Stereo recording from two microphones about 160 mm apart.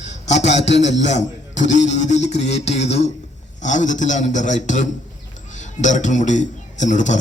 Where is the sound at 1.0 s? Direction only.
45° left (ahead or behind).